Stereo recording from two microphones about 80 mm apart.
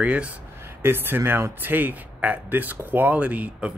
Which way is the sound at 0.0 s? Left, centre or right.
Centre.